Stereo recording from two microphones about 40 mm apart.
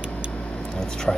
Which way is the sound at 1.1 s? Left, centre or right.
Centre.